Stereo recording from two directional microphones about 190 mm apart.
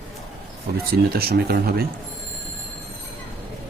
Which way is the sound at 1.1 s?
55° right (ahead or behind).